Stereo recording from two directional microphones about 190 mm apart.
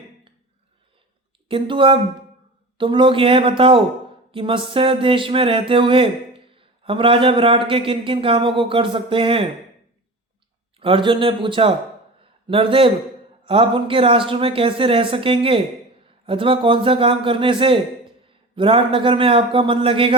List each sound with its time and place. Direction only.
1.5 s speech: 25° right (ahead or behind)
10.8 s speech: 25° right (ahead or behind)